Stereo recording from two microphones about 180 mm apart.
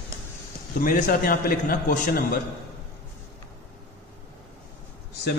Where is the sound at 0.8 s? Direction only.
50° left (ahead or behind).